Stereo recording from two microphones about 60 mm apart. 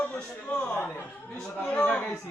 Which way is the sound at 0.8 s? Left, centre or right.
Left.